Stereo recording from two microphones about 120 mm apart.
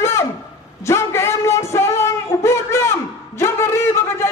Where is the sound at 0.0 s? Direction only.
20° left (ahead or behind).